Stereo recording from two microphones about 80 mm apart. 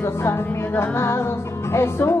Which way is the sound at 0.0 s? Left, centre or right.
Left.